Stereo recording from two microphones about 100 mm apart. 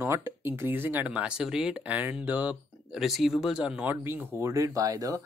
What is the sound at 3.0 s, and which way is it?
Speech, 5° right (ahead or behind).